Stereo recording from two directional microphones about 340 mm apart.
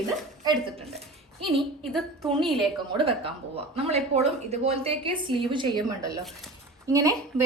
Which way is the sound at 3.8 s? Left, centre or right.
Centre.